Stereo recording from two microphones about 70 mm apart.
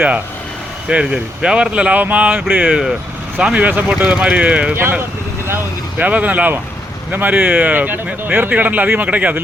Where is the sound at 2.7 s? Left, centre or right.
Centre.